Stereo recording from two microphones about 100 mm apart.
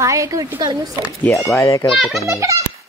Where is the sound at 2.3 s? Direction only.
30° right (ahead or behind).